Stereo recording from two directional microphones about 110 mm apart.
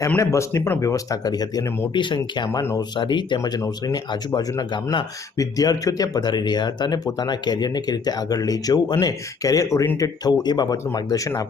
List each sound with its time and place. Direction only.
0.2 s speech: 30° left (ahead or behind)
1.9 s speech: 45° left (ahead or behind)
2.5 s speech: 30° left (ahead or behind)